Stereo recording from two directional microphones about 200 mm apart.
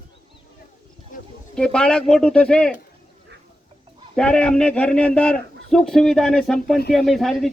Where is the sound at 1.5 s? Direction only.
5° left (ahead or behind).